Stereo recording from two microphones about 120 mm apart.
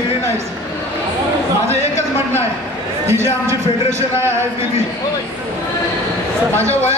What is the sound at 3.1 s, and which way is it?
Speech, 20° right (ahead or behind).